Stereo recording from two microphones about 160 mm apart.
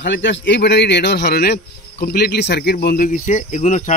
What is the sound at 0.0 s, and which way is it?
A man's voice, 90° left.